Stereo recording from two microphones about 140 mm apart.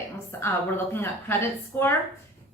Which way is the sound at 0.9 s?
15° left (ahead or behind).